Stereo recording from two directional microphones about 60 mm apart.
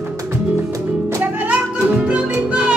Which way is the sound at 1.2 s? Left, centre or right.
Right.